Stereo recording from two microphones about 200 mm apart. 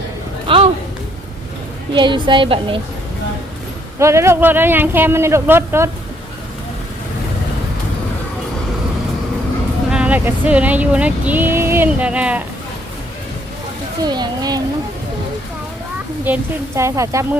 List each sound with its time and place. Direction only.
0.4 s a sound: 25° right (ahead or behind)
2.0 s a woman's voice: 25° right (ahead or behind)
3.9 s speech: 15° right (ahead or behind)
9.9 s speech: 5° right (ahead or behind)
14.0 s a woman's voice: 20° right (ahead or behind)
16.2 s speech: 10° right (ahead or behind)